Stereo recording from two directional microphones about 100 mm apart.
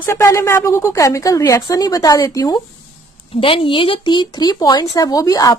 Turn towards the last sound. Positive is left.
turn(degrees=35)  # may be behind; listen again after turning